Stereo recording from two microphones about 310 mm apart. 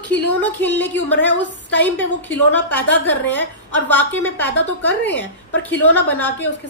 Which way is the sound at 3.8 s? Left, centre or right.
Centre.